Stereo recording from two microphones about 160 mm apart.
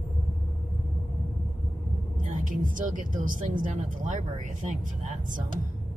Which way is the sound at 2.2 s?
55° right (ahead or behind).